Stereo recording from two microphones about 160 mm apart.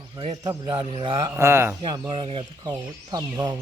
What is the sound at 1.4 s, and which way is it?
Speech, 15° right (ahead or behind).